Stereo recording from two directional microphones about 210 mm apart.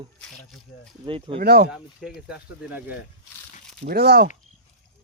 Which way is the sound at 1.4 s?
50° right (ahead or behind).